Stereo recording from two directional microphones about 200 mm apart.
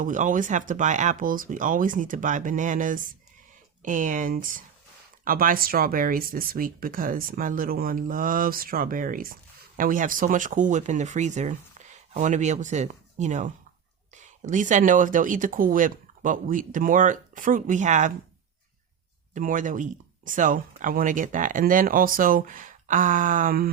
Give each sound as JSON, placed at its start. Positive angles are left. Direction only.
{"t": 0.0, "sound": "speech", "side_deg": -40}
{"t": 19.3, "sound": "speech", "side_deg": -40}